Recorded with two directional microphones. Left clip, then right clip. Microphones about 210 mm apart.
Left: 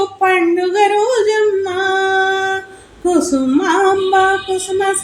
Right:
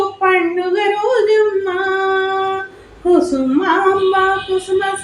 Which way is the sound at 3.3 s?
50° left (ahead or behind).